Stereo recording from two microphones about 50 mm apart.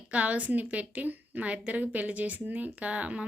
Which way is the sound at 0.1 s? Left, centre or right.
Right.